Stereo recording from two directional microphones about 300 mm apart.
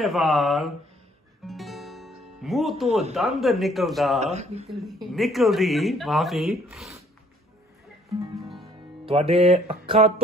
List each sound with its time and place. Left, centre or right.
0.0 s speech: centre
1.5 s music: centre
2.9 s music: right
3.2 s speech: centre
4.2 s music: right
4.6 s speech: centre
8.4 s music: centre
9.0 s music: centre